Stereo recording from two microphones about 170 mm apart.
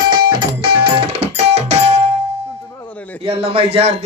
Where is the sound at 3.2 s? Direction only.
35° right (ahead or behind).